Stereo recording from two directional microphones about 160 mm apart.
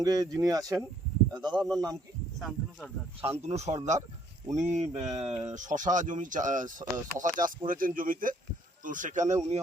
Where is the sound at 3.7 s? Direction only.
45° right (ahead or behind).